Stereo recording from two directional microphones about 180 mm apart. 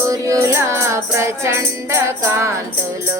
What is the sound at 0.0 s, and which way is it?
Music, 15° right (ahead or behind).